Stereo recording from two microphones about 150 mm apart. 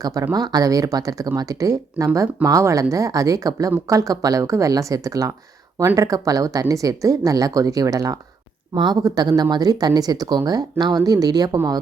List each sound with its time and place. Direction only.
0.0 s speech: 25° right (ahead or behind)